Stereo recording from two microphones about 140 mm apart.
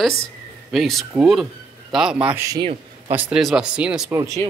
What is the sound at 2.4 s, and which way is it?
Speech, 25° right (ahead or behind).